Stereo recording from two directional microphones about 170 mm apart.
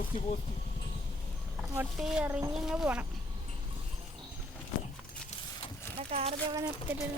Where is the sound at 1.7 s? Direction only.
5° right (ahead or behind).